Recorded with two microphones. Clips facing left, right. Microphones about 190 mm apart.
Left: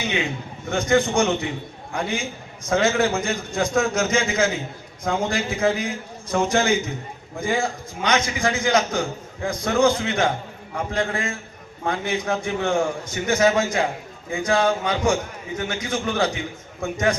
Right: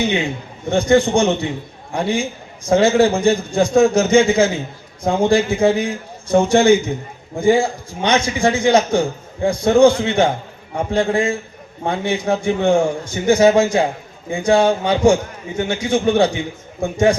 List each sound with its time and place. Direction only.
0.0 s a man's voice: 30° right (ahead or behind)